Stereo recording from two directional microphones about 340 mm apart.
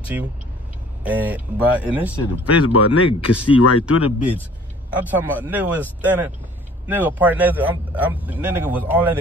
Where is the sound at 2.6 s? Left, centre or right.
Left.